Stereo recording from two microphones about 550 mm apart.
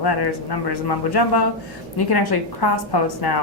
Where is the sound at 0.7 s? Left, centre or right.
Left.